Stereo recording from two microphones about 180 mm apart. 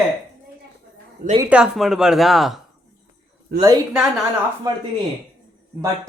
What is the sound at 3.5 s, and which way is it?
Speech, 60° right (ahead or behind).